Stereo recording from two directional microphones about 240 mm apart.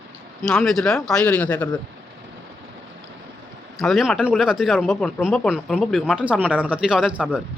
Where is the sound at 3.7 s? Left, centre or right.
Centre.